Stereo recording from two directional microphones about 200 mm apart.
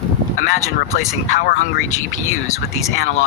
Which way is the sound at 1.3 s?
40° left (ahead or behind).